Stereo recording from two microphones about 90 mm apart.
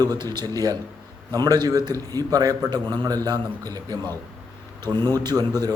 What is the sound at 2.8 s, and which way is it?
A man's voice, 55° right (ahead or behind).